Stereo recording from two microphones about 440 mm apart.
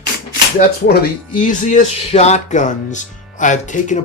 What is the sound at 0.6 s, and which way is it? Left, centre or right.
Speech, left.